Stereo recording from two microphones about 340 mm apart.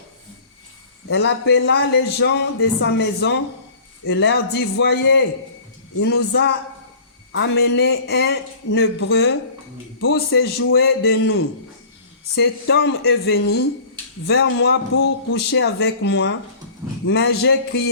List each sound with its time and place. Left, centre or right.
1.0 s a man's voice: left
10.0 s a man's voice: left
10.3 s a man's voice: left
12.4 s a man's voice: left